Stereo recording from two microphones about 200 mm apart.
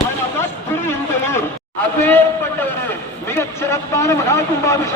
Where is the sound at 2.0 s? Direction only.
10° left (ahead or behind).